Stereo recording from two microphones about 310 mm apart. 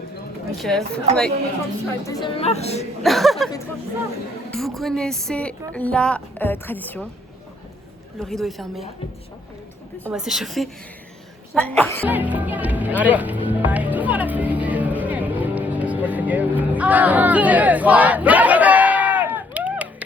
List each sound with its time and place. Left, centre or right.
0.5 s speech: centre
2.0 s speech: centre
3.0 s speech: centre
4.5 s speech: centre
8.2 s speech: centre
10.0 s speech: centre
12.1 s music: centre